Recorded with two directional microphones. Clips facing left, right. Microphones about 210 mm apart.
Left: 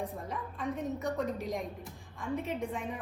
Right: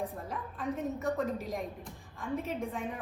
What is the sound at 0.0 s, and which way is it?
A woman's voice, centre (ahead or behind).